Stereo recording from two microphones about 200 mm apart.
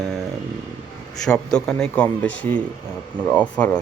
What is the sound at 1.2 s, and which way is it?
Speech, 5° left (ahead or behind).